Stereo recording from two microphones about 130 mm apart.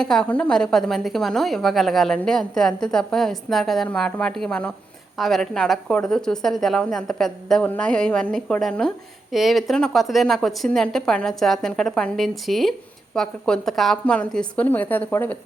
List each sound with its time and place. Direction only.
0.0 s a woman's voice: 5° left (ahead or behind)